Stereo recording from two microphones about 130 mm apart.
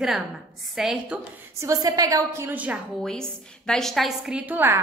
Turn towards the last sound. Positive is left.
turn(degrees=-15)  # may be behind; listen again after turning